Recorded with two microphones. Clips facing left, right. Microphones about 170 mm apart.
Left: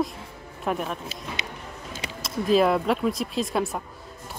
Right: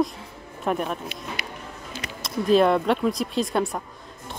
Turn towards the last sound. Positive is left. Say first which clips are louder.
# right 2 dB
turn(degrees=0)  # may be behind; listen again after turning